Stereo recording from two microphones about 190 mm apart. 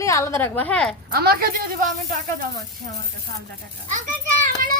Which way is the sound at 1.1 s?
55° right (ahead or behind).